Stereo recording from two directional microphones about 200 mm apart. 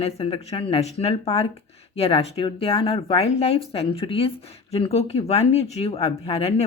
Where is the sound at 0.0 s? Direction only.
30° left (ahead or behind).